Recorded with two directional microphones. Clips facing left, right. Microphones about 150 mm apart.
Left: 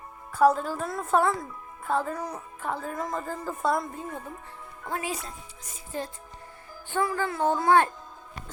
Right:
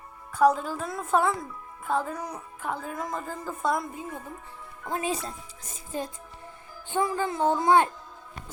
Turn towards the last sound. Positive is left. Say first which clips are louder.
# even
turn(degrees=-20)  # may be behind; listen again after turning